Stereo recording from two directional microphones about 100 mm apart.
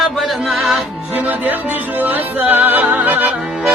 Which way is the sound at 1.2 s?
15° right (ahead or behind).